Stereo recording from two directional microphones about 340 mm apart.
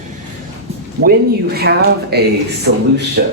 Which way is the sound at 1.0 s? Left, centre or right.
Right.